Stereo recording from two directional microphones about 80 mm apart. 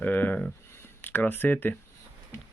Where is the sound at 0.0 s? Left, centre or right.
Left.